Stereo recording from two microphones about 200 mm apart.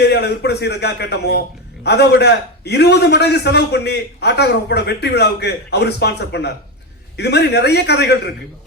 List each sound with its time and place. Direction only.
0.0 s a man's voice: 55° left (ahead or behind)